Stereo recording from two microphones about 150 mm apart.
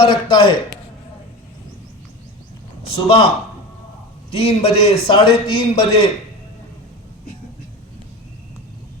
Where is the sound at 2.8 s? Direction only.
35° left (ahead or behind).